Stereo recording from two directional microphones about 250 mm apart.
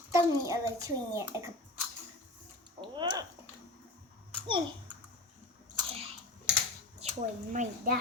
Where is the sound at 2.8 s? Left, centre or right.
Centre.